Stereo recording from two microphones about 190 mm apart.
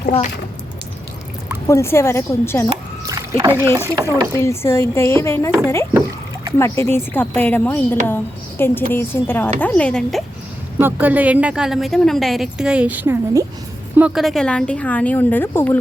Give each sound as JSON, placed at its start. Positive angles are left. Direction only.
{"t": 1.6, "sound": "a woman's voice", "side_deg": 15}
{"t": 3.1, "sound": "a woman's voice", "side_deg": -15}
{"t": 4.4, "sound": "a woman's voice", "side_deg": 15}
{"t": 6.6, "sound": "a woman's voice", "side_deg": 10}
{"t": 10.8, "sound": "a woman's voice", "side_deg": -10}